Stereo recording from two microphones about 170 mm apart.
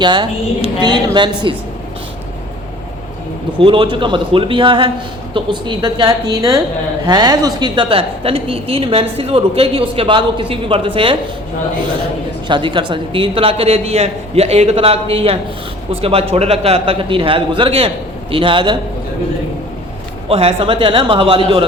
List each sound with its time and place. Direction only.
0.0 s a woman's voice: 25° right (ahead or behind)
3.6 s a woman's voice: 30° right (ahead or behind)
12.5 s a woman's voice: 30° right (ahead or behind)
20.2 s a woman's voice: 35° right (ahead or behind)